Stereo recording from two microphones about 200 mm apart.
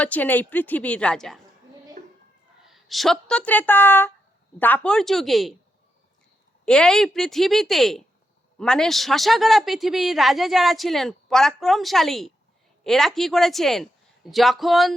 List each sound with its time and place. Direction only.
0.0 s a woman's voice: 10° left (ahead or behind)
2.0 s a sound: 35° right (ahead or behind)
2.6 s a woman's voice: centre (ahead or behind)
6.7 s a man's voice: 5° left (ahead or behind)